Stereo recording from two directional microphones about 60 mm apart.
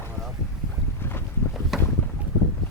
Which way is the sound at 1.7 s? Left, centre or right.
Centre.